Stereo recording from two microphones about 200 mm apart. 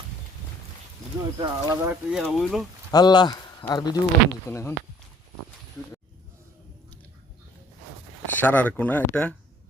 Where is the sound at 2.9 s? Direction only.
20° left (ahead or behind).